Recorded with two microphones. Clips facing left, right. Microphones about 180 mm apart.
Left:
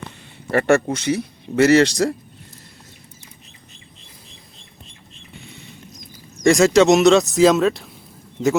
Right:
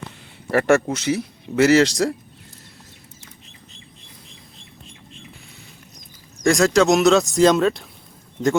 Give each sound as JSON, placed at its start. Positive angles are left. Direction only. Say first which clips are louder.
{"t": 0.5, "sound": "speech", "louder": "even", "side_deg": 0}
{"t": 6.4, "sound": "speech", "louder": "left 3 dB", "side_deg": 0}